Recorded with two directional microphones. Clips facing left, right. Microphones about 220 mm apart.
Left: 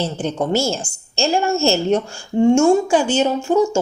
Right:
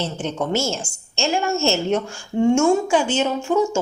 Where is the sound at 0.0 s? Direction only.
35° left (ahead or behind).